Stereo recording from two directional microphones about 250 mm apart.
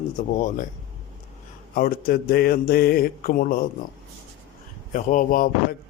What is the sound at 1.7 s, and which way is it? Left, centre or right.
A man's voice, left.